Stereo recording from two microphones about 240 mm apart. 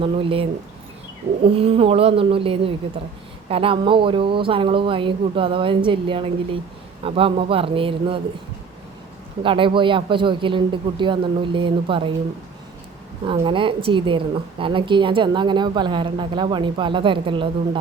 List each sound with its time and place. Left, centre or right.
0.0 s a woman's voice: right
1.5 s a woman's voice: right
9.4 s a woman's voice: right
13.2 s a woman's voice: right